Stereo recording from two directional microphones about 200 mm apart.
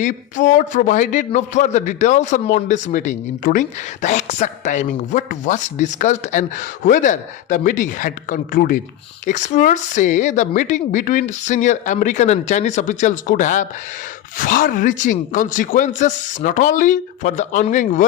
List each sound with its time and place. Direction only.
0.0 s a man's voice: 40° left (ahead or behind)